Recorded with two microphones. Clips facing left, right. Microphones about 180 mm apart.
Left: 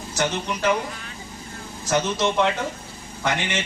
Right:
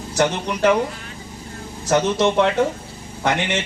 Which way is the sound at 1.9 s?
60° right (ahead or behind).